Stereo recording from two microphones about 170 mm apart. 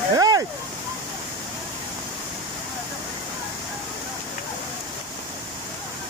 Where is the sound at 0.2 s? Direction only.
20° right (ahead or behind).